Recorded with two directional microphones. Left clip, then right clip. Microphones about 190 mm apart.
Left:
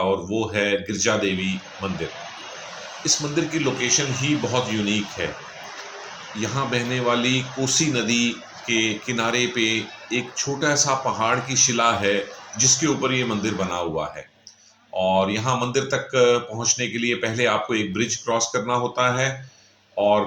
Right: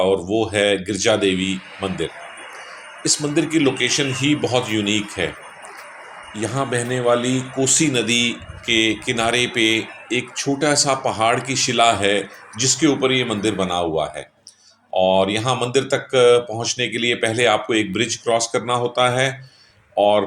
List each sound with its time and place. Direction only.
0.0 s speech: 35° right (ahead or behind)
6.4 s speech: 35° right (ahead or behind)